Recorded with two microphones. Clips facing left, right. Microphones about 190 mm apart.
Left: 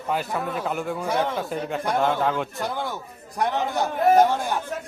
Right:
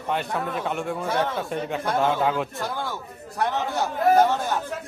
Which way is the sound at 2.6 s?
15° left (ahead or behind).